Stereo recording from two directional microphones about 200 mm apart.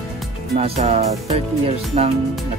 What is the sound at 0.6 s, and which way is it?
Speech, 30° right (ahead or behind).